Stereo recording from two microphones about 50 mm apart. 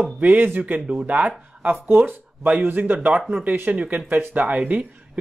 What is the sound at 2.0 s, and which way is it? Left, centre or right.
Speech, right.